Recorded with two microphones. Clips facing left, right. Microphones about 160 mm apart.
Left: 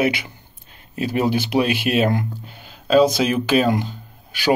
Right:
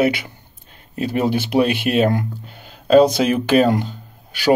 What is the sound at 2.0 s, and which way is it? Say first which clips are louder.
Speech: right 2 dB; 40° right (ahead or behind).